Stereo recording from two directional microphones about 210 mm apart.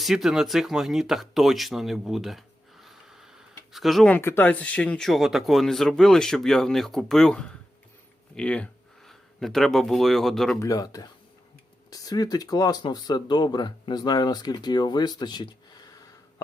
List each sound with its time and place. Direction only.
0.0 s speech: centre (ahead or behind)
10.6 s speech: 15° left (ahead or behind)